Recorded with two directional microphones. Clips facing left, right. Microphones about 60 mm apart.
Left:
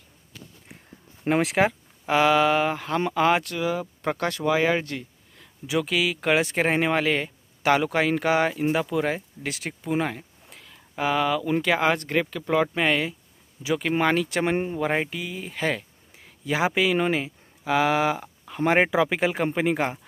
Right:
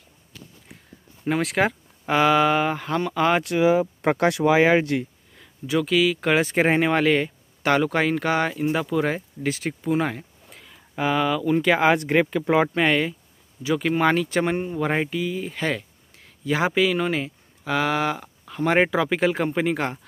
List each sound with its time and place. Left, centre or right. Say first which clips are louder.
1.4 s speech: right 1 dB; centre
3.5 s speech: right 8 dB; right
5.7 s speech: right 4 dB; centre
12.7 s speech: right 3 dB; centre